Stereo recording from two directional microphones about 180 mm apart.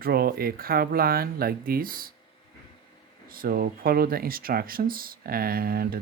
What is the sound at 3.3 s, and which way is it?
Speech, 55° right (ahead or behind).